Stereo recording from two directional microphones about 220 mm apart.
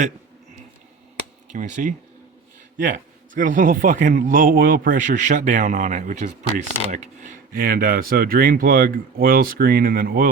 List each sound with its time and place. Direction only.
1.5 s a man's voice: 35° right (ahead or behind)